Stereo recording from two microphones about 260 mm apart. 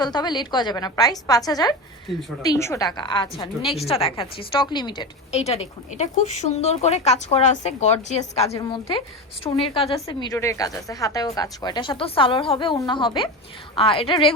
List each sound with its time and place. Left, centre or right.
0.0 s a woman's voice: centre